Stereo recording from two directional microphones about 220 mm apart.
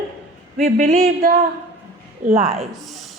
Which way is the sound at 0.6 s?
30° right (ahead or behind).